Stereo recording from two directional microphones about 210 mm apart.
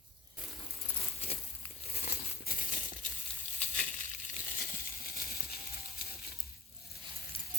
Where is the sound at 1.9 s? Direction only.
45° left (ahead or behind).